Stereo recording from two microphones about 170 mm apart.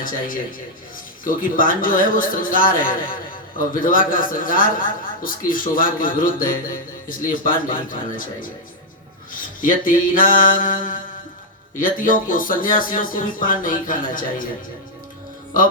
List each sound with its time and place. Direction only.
1.2 s a man's voice: 55° left (ahead or behind)